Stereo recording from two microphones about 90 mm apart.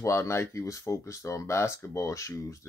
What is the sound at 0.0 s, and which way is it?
Speech, 35° left (ahead or behind).